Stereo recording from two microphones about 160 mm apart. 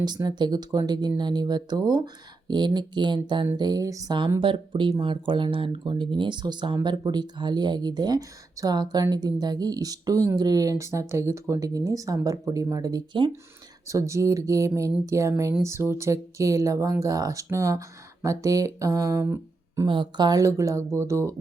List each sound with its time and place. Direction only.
0.0 s speech: 25° right (ahead or behind)
19.9 s speech: 30° right (ahead or behind)